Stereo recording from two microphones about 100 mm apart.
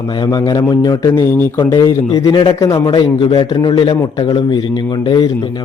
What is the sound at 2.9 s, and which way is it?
Speech, 70° left (ahead or behind).